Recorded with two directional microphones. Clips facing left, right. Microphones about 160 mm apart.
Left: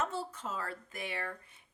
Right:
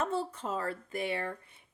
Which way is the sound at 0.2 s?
30° right (ahead or behind).